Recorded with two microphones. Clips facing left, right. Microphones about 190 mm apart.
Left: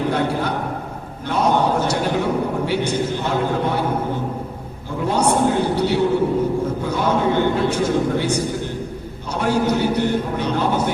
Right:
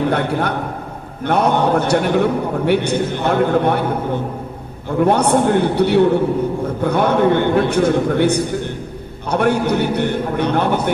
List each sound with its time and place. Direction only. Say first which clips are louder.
0.1 s a man's voice: right 2 dB; 60° right (ahead or behind)
4.9 s a man's voice: right 4 dB; 60° right (ahead or behind)